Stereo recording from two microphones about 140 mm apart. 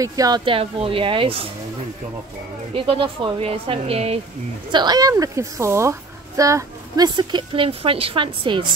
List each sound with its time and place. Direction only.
0.0 s a woman's voice: 25° right (ahead or behind)
0.5 s speech: 40° right (ahead or behind)
2.7 s speech: 40° right (ahead or behind)
4.6 s a woman's voice: 30° right (ahead or behind)